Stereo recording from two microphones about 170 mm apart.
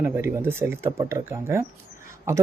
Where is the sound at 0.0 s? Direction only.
15° right (ahead or behind).